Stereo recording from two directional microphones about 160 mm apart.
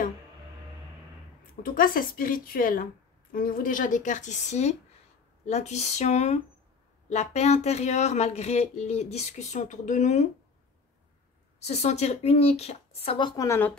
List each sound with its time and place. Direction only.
1.6 s a woman's voice: 60° left (ahead or behind)
11.6 s speech: 45° left (ahead or behind)
13.4 s speech: 15° left (ahead or behind)